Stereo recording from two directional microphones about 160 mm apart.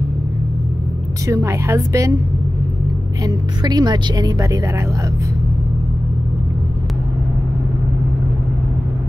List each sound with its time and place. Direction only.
1.2 s speech: 20° right (ahead or behind)
3.3 s speech: 25° right (ahead or behind)